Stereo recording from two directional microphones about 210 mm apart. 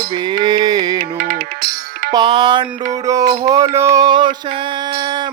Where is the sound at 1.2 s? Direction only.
45° right (ahead or behind).